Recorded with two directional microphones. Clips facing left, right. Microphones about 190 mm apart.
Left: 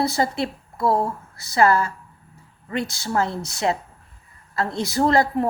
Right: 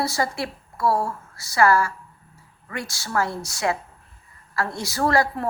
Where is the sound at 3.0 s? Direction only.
20° left (ahead or behind).